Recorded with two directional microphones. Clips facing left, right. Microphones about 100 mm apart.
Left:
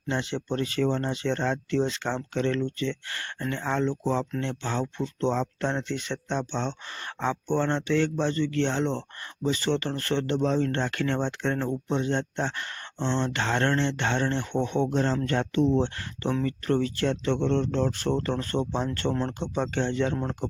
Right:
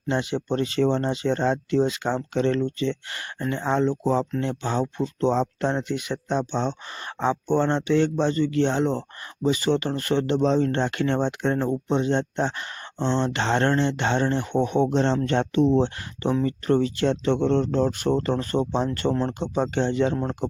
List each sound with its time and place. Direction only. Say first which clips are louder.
0.1 s speech: right 4 dB; 15° right (ahead or behind)